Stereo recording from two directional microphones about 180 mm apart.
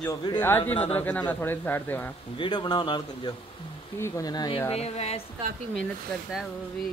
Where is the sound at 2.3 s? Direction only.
25° left (ahead or behind).